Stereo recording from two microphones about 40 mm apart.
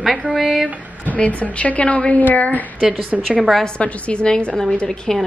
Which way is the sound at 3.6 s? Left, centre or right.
Left.